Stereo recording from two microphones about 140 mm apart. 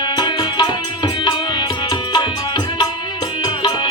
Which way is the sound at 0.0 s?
30° left (ahead or behind).